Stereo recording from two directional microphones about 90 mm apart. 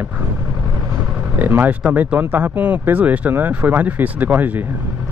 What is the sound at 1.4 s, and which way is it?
Speech, 20° right (ahead or behind).